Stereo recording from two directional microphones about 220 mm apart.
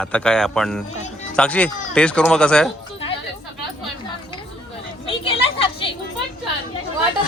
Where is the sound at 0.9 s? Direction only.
30° left (ahead or behind).